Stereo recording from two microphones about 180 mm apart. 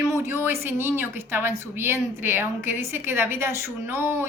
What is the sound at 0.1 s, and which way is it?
A woman's voice, 15° right (ahead or behind).